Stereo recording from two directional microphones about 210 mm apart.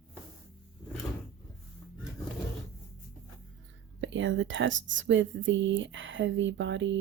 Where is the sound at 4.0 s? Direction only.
65° right (ahead or behind).